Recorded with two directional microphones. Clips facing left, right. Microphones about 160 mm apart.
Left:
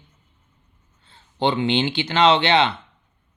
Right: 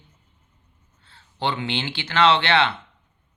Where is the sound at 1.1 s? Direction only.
20° left (ahead or behind).